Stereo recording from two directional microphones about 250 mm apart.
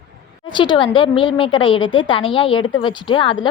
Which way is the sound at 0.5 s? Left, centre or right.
Centre.